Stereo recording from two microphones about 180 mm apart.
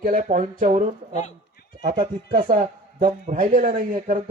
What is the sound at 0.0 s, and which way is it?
Speech, 50° right (ahead or behind).